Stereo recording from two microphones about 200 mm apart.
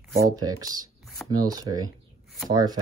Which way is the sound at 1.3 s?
20° right (ahead or behind).